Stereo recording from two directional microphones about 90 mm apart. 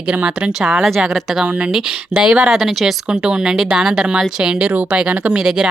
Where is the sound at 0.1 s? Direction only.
15° right (ahead or behind).